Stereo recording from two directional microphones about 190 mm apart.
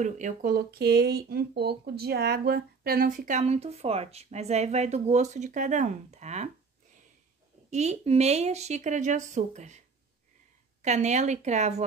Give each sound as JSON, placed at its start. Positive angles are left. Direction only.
{"t": 0.0, "sound": "speech", "side_deg": -45}
{"t": 7.7, "sound": "speech", "side_deg": -35}
{"t": 10.8, "sound": "speech", "side_deg": -40}